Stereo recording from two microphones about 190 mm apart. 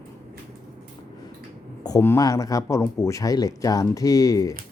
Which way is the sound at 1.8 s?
15° left (ahead or behind).